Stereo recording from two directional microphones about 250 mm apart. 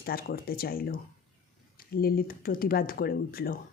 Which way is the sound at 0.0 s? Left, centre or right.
Left.